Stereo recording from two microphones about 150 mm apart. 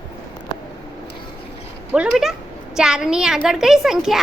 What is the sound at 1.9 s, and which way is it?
A woman's voice, 5° right (ahead or behind).